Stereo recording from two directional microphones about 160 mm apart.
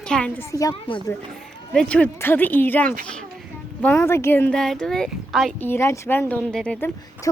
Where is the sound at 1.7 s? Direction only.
5° left (ahead or behind).